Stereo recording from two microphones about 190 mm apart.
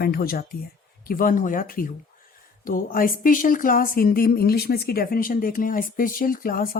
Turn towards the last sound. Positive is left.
turn(degrees=50)  # may be behind; listen again after turning